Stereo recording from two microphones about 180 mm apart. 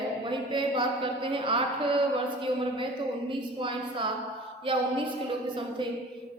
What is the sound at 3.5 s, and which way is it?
A woman's voice, 30° right (ahead or behind).